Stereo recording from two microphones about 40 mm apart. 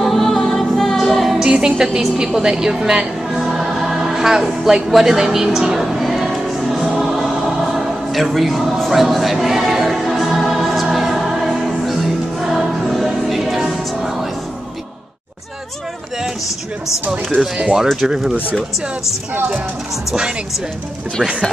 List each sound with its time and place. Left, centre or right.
0.0 s music: centre
1.4 s a woman's voice: centre
3.3 s choir: centre
9.0 s music: centre
18.0 s a woman's voice: centre
20.1 s a woman's voice: centre